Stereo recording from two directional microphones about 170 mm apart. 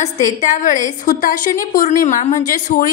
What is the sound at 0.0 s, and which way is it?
A woman's voice, 45° left (ahead or behind).